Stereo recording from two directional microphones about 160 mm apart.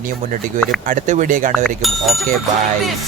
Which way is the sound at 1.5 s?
Centre (ahead or behind).